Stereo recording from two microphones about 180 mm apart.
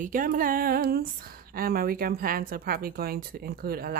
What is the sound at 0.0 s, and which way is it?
A woman's voice, 50° right (ahead or behind).